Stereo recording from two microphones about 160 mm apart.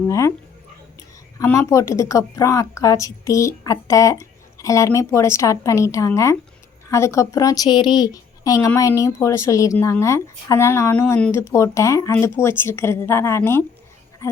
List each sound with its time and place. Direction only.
0.1 s speech: 20° left (ahead or behind)
1.4 s a woman's voice: 20° left (ahead or behind)